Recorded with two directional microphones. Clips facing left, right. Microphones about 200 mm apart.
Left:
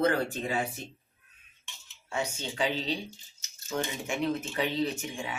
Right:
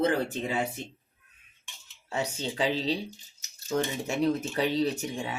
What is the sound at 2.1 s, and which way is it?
Speech, 35° right (ahead or behind).